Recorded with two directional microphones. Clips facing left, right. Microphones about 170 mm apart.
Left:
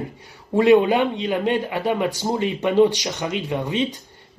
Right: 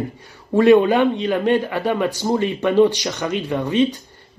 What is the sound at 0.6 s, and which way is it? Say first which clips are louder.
A man's voice: right 2 dB; 15° left (ahead or behind).